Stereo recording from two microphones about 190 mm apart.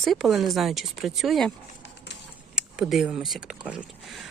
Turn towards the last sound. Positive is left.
turn(degrees=-5)  # may be behind; listen again after turning